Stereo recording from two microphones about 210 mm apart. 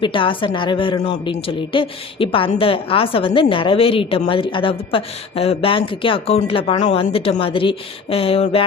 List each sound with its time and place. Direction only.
0.0 s a woman's voice: 25° left (ahead or behind)